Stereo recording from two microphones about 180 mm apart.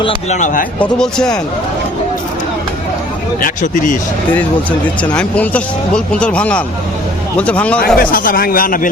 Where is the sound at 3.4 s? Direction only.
50° left (ahead or behind).